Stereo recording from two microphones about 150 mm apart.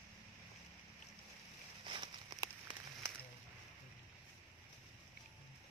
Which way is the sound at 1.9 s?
35° right (ahead or behind).